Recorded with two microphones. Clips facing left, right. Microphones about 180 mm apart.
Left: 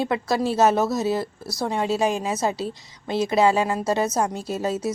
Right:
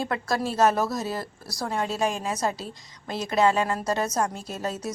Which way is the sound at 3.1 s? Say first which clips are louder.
Left 3 dB; 30° left (ahead or behind).